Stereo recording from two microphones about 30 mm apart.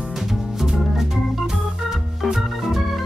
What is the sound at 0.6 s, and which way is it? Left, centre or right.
Organ, centre.